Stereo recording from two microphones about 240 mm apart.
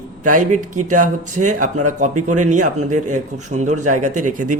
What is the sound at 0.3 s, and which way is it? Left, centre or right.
Speech, right.